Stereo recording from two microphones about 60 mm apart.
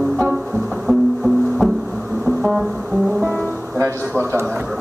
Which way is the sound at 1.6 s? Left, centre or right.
Centre.